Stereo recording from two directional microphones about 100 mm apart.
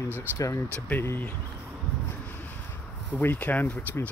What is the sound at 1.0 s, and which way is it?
Speech, 25° left (ahead or behind).